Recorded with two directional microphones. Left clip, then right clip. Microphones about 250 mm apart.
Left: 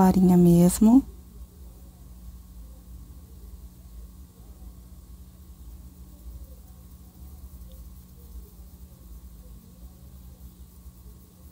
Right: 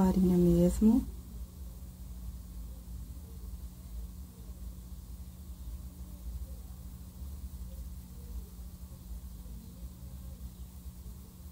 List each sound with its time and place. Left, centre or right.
0.0 s speech: left